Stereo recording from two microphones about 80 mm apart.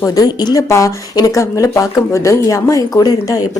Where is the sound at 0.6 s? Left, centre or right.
Left.